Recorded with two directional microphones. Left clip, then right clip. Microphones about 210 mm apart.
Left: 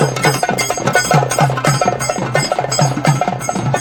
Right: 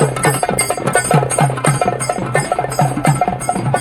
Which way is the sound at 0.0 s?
Centre (ahead or behind).